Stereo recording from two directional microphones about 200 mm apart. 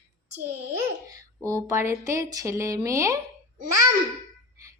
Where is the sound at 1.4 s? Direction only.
15° right (ahead or behind).